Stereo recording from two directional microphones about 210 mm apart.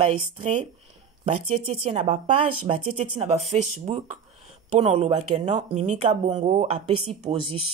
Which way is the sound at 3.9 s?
30° right (ahead or behind).